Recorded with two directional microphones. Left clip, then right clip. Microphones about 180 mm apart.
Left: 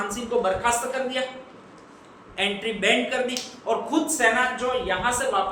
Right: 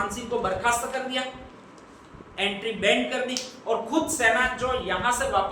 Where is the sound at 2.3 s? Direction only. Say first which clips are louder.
Left 2 dB; 15° left (ahead or behind).